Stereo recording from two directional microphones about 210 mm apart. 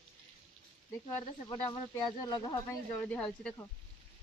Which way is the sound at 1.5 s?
20° left (ahead or behind).